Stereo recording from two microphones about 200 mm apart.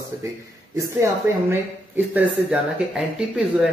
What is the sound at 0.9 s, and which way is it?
Speech, 15° right (ahead or behind).